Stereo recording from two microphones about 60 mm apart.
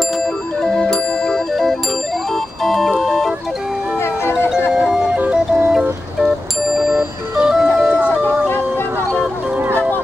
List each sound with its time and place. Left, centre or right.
0.6 s music: centre
4.0 s music: left
4.8 s music: centre